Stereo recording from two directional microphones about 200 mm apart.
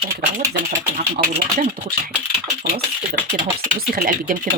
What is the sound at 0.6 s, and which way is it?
Speech, 40° right (ahead or behind).